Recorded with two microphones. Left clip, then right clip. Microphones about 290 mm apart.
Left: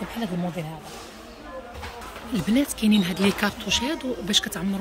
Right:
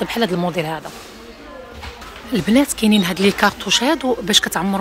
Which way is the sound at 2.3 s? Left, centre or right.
Centre.